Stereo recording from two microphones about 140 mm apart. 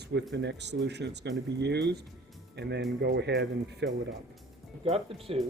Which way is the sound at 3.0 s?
90° right.